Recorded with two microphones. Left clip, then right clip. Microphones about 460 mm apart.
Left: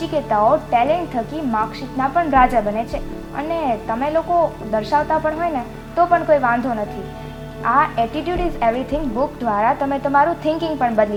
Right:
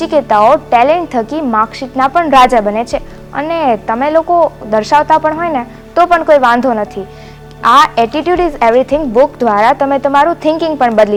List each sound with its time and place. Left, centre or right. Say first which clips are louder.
0.0 s a woman's voice: right 8 dB; right